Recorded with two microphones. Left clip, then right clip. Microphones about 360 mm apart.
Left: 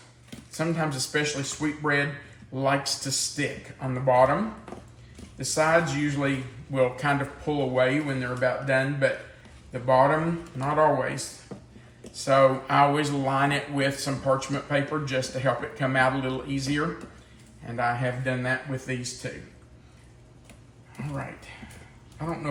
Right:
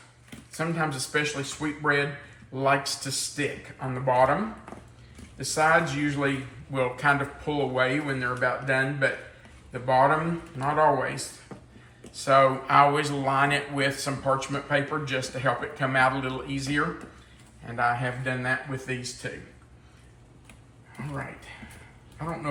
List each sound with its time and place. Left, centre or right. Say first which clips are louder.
0.3 s speech: left 2 dB; centre
21.0 s speech: even; centre